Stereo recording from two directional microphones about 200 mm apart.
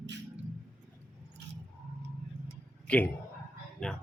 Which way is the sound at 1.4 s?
60° right (ahead or behind).